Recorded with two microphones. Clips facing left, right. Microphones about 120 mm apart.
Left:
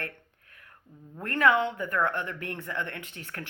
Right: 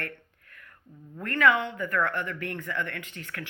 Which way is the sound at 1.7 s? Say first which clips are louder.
Even; 10° left (ahead or behind).